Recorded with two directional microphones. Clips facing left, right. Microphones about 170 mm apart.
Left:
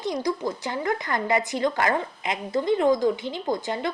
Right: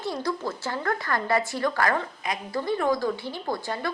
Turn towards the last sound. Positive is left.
turn(degrees=20)  # may be behind; listen again after turning